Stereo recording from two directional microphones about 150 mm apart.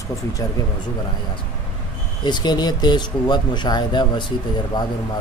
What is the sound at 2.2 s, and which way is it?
Speech, 30° left (ahead or behind).